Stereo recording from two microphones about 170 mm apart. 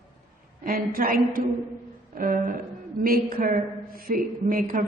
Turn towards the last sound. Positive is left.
turn(degrees=-55)  # may be behind; listen again after turning